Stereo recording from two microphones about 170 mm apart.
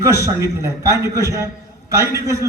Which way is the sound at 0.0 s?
20° right (ahead or behind).